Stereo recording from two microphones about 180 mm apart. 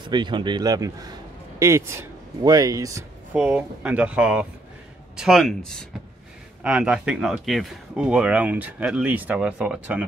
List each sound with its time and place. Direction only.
0.1 s a man's voice: 25° right (ahead or behind)
3.3 s speech: 10° right (ahead or behind)